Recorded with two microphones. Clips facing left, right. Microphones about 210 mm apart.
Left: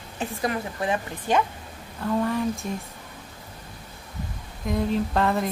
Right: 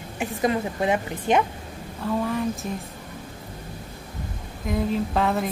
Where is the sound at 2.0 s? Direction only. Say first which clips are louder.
Left 1 dB; centre (ahead or behind).